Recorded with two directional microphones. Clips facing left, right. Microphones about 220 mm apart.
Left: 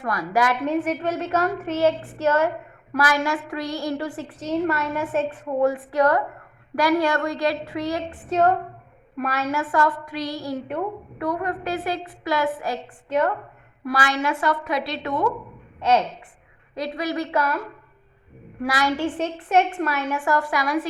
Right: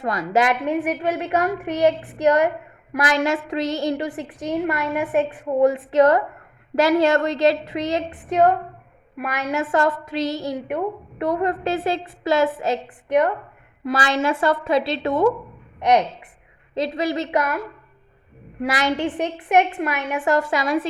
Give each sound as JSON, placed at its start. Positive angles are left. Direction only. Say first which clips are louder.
{"t": 0.0, "sound": "a woman's voice", "louder": "right 3 dB", "side_deg": -20}
{"t": 15.8, "sound": "a woman's voice", "louder": "right 2 dB", "side_deg": -15}
{"t": 18.6, "sound": "a woman's voice", "louder": "right 1 dB", "side_deg": -20}